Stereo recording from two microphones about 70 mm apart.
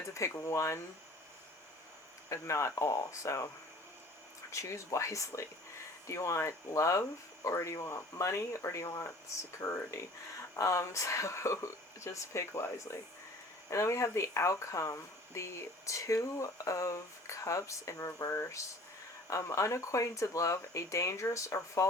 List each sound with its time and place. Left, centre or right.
0.1 s speech: left
2.3 s speech: left
4.5 s speech: left
10.6 s speech: left